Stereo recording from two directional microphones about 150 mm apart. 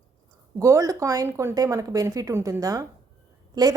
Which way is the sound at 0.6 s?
20° right (ahead or behind).